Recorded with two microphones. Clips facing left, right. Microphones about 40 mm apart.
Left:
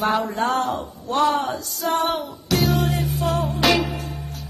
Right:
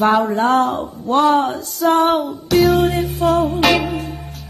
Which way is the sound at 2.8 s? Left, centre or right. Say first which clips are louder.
Right 7 dB; right.